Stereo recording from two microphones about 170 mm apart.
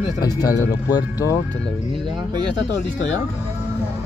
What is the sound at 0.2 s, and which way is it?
Speech, 20° left (ahead or behind).